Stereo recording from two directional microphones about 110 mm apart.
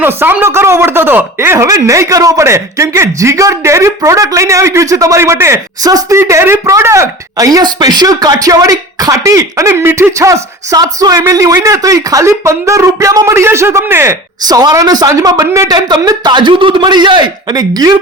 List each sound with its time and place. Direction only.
0.0 s speech: 20° right (ahead or behind)
14.4 s speech: 35° right (ahead or behind)